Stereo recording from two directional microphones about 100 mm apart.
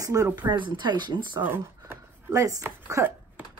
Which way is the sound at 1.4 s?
25° right (ahead or behind).